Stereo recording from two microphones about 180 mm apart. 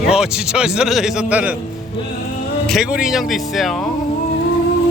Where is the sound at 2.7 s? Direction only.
Centre (ahead or behind).